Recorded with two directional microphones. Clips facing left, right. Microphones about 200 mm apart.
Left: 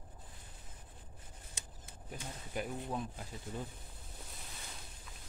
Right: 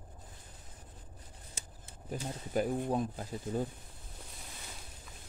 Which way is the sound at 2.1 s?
40° right (ahead or behind).